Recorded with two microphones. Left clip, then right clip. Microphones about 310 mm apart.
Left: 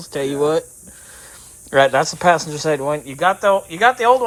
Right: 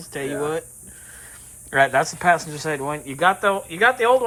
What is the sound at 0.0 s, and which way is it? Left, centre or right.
Speech, centre.